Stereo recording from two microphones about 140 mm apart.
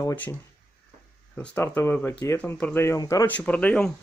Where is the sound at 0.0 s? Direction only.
15° left (ahead or behind).